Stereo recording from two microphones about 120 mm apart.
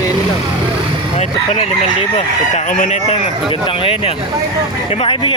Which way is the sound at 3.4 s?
45° left (ahead or behind).